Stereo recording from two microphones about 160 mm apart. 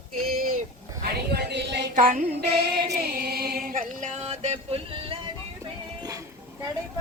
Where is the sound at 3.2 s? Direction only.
75° right (ahead or behind); by 5.2 s 35° right (ahead or behind).